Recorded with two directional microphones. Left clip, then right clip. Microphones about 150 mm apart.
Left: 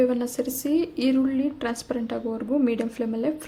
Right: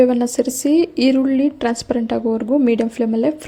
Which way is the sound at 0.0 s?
35° right (ahead or behind).